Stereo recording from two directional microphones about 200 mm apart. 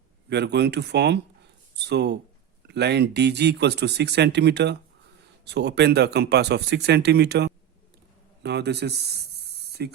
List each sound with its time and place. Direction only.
0.3 s speech: 55° right (ahead or behind)